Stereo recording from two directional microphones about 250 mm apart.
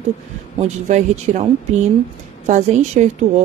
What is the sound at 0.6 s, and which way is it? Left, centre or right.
Speech, right.